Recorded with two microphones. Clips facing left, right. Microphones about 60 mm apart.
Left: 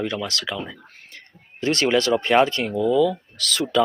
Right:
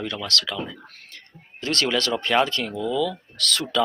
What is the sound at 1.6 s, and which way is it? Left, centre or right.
Speech, left.